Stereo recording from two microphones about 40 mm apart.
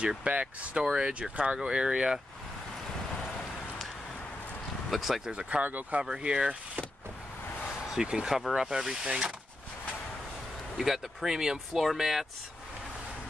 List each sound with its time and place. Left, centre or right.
0.2 s speech: right
4.9 s speech: centre
5.3 s speech: right
5.6 s speech: right
6.2 s speech: right
7.9 s speech: centre
10.8 s speech: centre
11.7 s speech: centre